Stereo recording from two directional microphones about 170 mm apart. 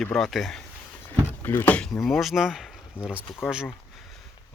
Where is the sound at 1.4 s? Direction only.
10° left (ahead or behind).